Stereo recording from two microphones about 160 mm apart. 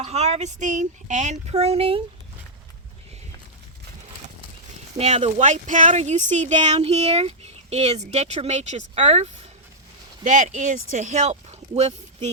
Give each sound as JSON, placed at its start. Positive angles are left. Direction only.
{"t": 0.0, "sound": "speech", "side_deg": -45}
{"t": 4.9, "sound": "speech", "side_deg": -40}